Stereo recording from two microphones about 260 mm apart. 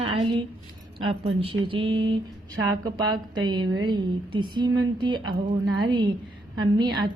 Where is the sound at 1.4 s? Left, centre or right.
Right.